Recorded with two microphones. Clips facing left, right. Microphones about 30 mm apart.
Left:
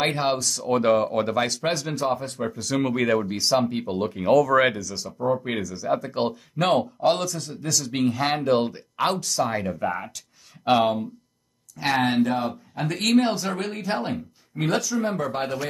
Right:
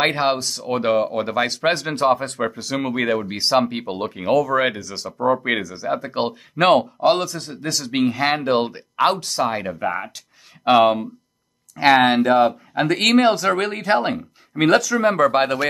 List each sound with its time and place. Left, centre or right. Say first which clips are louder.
0.0 s speech: right 4 dB; right
0.7 s speech: right 1 dB; centre
1.6 s speech: right 6 dB; right
2.6 s speech: left 2 dB; centre
3.3 s speech: right 3 dB; right
4.1 s speech: even; centre
4.7 s speech: right 3 dB; right
6.5 s speech: right 7 dB; right
7.0 s speech: right 4 dB; right
7.3 s speech: right 2 dB; right
8.0 s speech: right 4 dB; centre
8.5 s speech: right 2 dB; right
11.7 s speech: right 8 dB; right
14.6 s speech: right 8 dB; right